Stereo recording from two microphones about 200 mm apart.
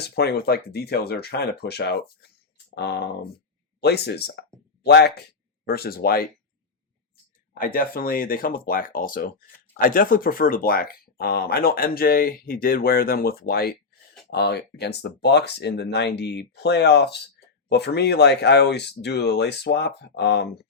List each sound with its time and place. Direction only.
0.0 s speech: 55° left (ahead or behind)
7.5 s speech: 45° left (ahead or behind)